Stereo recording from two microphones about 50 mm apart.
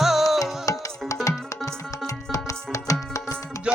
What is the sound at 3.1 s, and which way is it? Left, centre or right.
Music, left.